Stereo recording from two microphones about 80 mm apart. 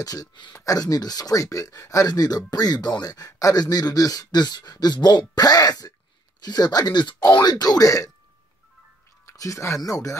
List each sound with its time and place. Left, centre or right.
0.0 s speech: left
9.2 s speech: left